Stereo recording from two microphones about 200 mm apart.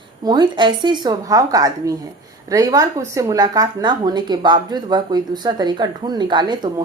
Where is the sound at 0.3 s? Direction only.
20° right (ahead or behind).